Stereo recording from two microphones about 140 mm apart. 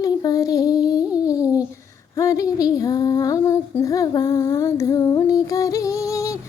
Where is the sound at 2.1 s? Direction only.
25° left (ahead or behind).